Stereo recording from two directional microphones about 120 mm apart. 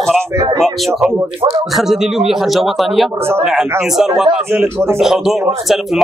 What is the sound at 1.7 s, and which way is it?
Speech, 5° right (ahead or behind).